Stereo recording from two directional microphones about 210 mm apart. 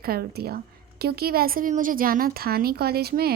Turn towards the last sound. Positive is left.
turn(degrees=-45)  # may be behind; listen again after turning